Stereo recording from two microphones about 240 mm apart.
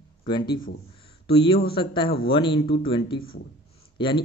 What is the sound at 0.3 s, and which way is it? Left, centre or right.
Speech, centre.